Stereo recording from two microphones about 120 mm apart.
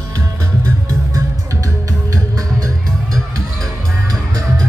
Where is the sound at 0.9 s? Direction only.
25° right (ahead or behind).